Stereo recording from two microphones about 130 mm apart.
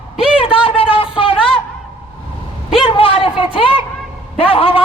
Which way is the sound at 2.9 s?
45° left (ahead or behind).